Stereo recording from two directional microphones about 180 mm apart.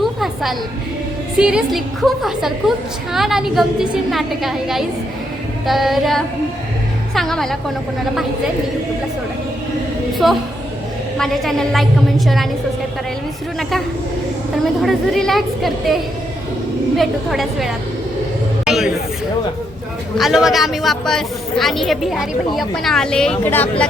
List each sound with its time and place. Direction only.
0.0 s music: centre (ahead or behind)
1.4 s a woman's voice: 5° right (ahead or behind)
10.2 s a woman's voice: centre (ahead or behind)
13.6 s a woman's voice: centre (ahead or behind)
17.0 s a woman's voice: centre (ahead or behind)
18.6 s a sound: centre (ahead or behind)
20.1 s a woman's voice: centre (ahead or behind)